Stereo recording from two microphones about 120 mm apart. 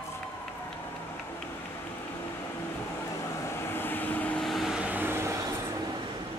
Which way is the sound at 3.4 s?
20° left (ahead or behind).